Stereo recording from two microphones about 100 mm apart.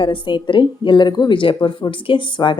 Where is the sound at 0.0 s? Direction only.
55° left (ahead or behind).